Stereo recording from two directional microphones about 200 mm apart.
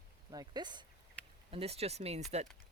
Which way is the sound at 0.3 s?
20° right (ahead or behind).